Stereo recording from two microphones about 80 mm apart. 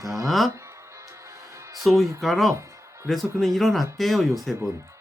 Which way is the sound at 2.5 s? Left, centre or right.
Right.